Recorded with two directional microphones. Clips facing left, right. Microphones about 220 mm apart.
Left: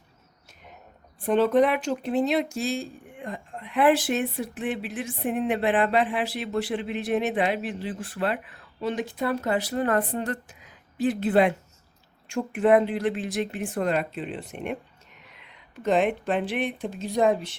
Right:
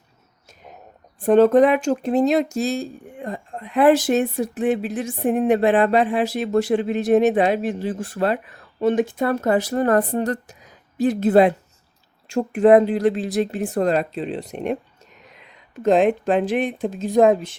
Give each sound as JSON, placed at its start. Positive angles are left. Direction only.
{"t": 1.2, "sound": "a woman's voice", "side_deg": -45}